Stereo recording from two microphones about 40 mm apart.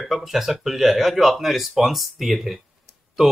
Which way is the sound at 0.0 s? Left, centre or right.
Centre.